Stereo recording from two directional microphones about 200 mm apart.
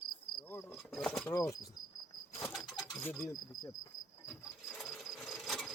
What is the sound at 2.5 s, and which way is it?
Bird, centre (ahead or behind).